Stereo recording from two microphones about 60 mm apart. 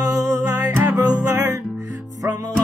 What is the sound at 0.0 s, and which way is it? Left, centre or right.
Music, right.